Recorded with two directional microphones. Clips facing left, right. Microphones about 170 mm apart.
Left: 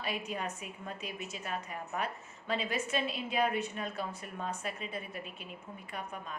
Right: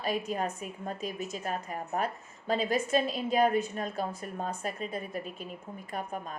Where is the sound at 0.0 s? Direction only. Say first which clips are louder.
Right 6 dB; 40° right (ahead or behind).